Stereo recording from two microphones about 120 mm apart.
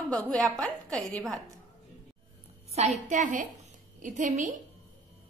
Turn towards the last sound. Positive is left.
turn(degrees=-90)